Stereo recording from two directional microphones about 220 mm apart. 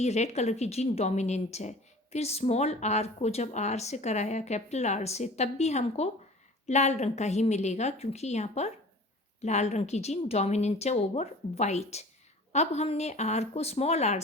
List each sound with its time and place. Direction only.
0.0 s a woman's voice: 30° left (ahead or behind)